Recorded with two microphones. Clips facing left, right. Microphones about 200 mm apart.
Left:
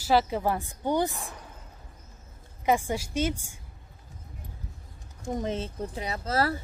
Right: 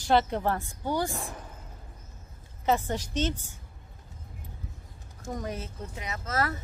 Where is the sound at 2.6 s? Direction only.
10° left (ahead or behind).